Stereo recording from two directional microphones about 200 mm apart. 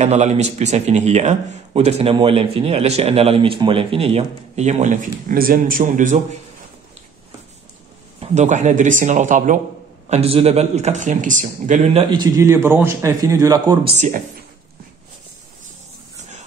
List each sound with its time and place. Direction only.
0.0 s speech: 35° right (ahead or behind)
8.2 s speech: 35° right (ahead or behind); by 13.9 s 20° right (ahead or behind)
13.9 s speech: 40° right (ahead or behind)
16.2 s music: 35° right (ahead or behind)